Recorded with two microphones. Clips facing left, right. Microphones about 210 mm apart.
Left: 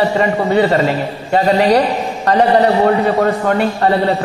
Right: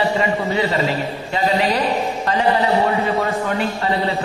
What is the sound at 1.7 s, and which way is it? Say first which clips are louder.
Speech: left 6 dB; 70° left (ahead or behind).